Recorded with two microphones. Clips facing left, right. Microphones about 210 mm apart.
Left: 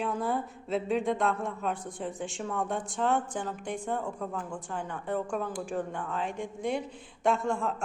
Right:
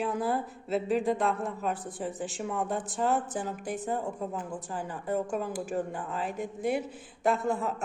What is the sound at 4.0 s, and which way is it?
Speech, 25° right (ahead or behind).